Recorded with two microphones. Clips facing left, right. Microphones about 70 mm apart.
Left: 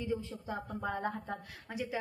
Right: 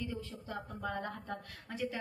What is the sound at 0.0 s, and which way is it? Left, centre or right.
A woman's voice, left.